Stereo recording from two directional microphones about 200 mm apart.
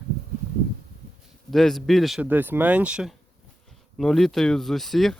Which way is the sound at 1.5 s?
Centre (ahead or behind).